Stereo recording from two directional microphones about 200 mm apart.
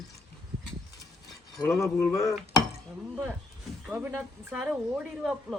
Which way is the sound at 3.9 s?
10° right (ahead or behind).